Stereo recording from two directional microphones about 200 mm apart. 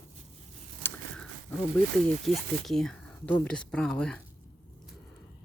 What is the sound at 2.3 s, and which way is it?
Speech, centre (ahead or behind).